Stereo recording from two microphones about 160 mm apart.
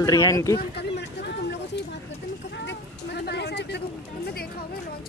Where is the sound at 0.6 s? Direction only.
90° left.